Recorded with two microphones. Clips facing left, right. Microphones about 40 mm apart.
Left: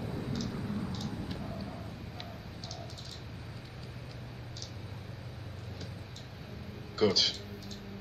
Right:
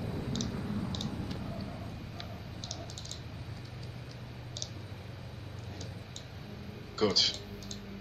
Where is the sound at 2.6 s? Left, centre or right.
Right.